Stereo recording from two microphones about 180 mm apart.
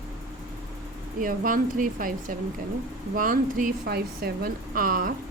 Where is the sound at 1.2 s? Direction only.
50° right (ahead or behind).